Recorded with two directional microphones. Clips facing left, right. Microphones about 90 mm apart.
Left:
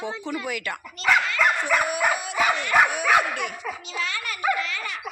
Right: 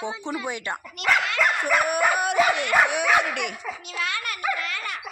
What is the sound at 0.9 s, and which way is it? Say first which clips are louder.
Speech: left 1 dB; 75° right (ahead or behind).